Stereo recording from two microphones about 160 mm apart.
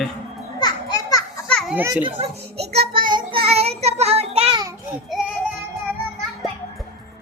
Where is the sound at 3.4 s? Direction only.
40° right (ahead or behind).